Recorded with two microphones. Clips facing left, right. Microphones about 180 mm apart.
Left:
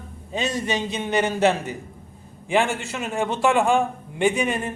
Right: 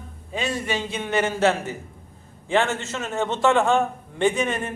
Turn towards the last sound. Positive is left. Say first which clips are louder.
# even
turn(degrees=15)  # may be behind; listen again after turning